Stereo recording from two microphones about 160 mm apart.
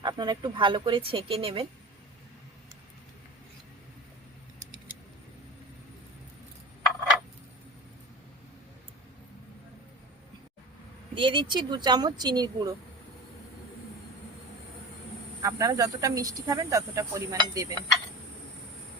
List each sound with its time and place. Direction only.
0.0 s speech: 25° right (ahead or behind)
11.1 s speech: 30° right (ahead or behind)
15.4 s speech: 20° right (ahead or behind)